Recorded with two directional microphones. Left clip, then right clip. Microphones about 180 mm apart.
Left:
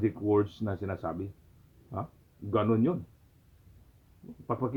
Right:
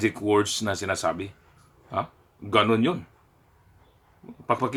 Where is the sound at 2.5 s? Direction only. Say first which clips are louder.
Right 7 dB; 15° right (ahead or behind).